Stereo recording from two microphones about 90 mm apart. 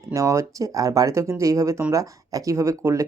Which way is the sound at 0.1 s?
35° right (ahead or behind).